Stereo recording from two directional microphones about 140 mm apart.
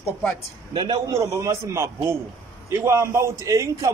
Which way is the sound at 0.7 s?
30° right (ahead or behind).